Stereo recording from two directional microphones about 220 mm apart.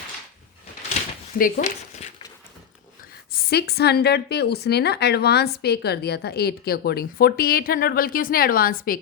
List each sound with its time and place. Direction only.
1.4 s speech: 40° left (ahead or behind)
3.3 s a woman's voice: 45° left (ahead or behind)